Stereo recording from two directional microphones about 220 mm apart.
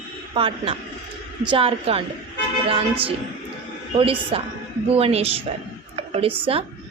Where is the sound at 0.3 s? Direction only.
25° right (ahead or behind).